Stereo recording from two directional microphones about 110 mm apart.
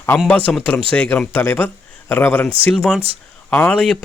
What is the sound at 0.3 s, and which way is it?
Speech, 10° left (ahead or behind).